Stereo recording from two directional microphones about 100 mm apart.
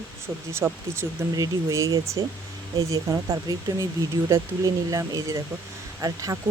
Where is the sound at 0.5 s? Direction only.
25° right (ahead or behind).